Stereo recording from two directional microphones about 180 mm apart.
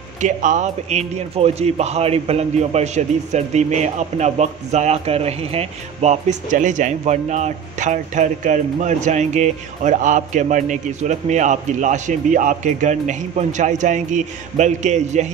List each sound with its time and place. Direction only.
0.2 s a man's voice: 45° right (ahead or behind)